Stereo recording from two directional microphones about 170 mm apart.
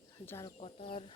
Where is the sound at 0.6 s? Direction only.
35° left (ahead or behind).